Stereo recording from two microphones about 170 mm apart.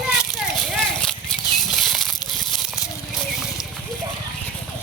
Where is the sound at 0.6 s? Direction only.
Centre (ahead or behind).